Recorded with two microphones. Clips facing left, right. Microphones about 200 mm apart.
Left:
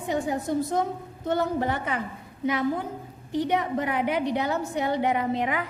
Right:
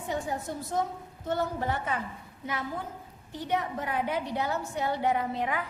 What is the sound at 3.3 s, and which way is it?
A woman's voice, 15° left (ahead or behind).